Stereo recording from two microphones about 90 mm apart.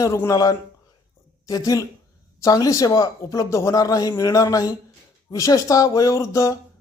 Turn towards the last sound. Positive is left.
turn(degrees=35)  # may be behind; listen again after turning